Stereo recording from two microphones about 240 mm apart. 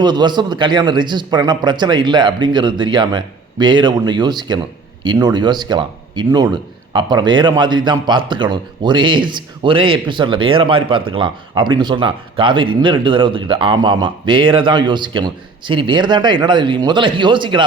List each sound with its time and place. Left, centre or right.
0.0 s a man's voice: centre